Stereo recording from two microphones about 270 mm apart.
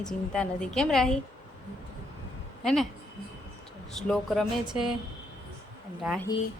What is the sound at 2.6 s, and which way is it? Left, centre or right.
Speech, centre.